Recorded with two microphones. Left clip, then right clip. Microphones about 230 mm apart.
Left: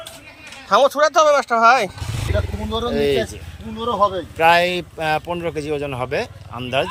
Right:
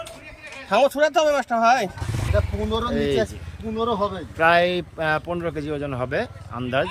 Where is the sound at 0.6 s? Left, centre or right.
Centre.